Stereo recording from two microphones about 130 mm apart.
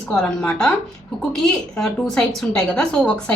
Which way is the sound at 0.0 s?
5° left (ahead or behind).